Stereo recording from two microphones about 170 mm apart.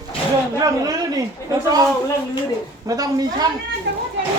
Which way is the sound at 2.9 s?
20° right (ahead or behind).